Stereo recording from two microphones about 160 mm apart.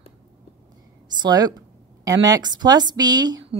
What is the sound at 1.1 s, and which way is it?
A woman's voice, 25° right (ahead or behind).